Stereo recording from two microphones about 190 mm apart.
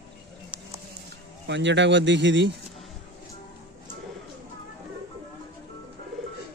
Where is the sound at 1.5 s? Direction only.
70° right (ahead or behind).